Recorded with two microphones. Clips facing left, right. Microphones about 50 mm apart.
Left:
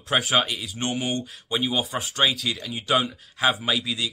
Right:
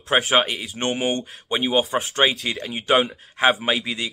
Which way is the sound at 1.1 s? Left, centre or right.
Centre.